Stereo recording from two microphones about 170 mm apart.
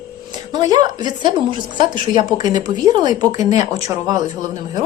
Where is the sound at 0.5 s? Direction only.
25° right (ahead or behind).